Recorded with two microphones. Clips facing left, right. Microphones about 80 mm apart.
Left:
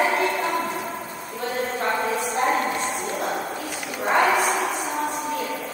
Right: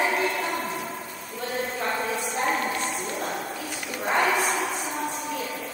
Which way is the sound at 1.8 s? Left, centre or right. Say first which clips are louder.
Left 5 dB; left.